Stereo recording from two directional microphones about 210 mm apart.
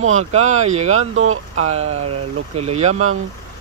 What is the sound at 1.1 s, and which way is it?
Speech, 80° right.